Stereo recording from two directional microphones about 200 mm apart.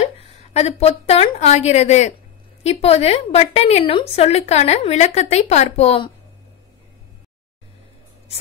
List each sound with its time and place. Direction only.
0.0 s a woman's voice: 30° left (ahead or behind)